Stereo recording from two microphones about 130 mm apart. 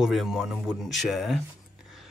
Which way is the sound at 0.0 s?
Centre (ahead or behind).